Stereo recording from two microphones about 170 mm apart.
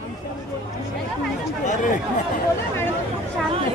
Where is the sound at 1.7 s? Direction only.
50° left (ahead or behind).